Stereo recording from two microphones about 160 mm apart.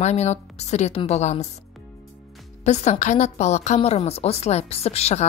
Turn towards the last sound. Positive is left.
turn(degrees=40)  # may be behind; listen again after turning